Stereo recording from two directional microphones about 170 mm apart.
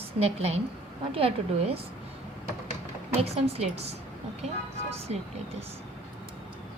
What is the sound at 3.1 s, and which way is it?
Speech, 35° right (ahead or behind).